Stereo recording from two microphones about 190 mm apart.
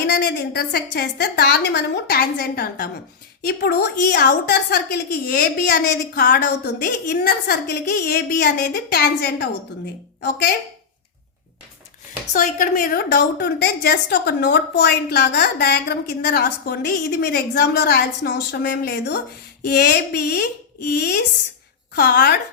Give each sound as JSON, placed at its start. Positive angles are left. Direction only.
{"t": 0.0, "sound": "a woman's voice", "side_deg": 60}
{"t": 12.3, "sound": "a woman's voice", "side_deg": 40}